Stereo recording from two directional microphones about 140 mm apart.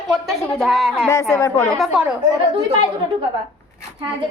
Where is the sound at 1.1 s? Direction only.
20° left (ahead or behind).